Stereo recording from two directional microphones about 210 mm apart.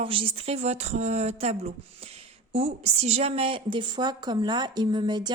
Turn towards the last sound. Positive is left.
turn(degrees=-20)  # may be behind; listen again after turning